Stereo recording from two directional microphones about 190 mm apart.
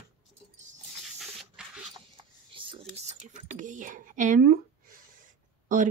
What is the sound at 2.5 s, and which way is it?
Computer keyboard, 30° right (ahead or behind).